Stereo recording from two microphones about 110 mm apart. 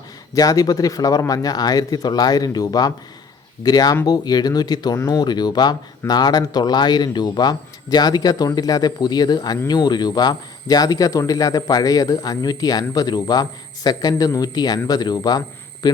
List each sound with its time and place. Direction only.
0.3 s a man's voice: 35° left (ahead or behind)